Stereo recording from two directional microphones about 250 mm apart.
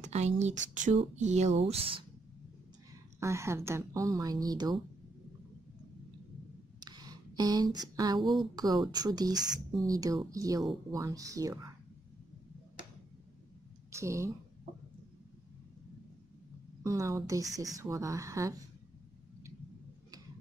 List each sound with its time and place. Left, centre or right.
0.0 s speech: right
3.2 s a woman's voice: centre
6.8 s a sound: centre
8.2 s speech: centre
8.5 s a woman's voice: centre
13.9 s a woman's voice: centre
16.8 s a woman's voice: centre